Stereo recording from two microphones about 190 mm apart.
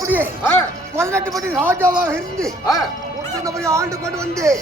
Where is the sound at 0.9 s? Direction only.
15° right (ahead or behind).